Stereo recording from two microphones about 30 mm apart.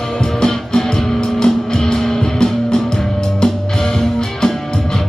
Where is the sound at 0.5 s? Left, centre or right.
Centre.